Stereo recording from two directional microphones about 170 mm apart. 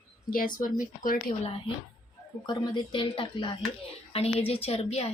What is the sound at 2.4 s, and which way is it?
A woman's voice, 30° left (ahead or behind).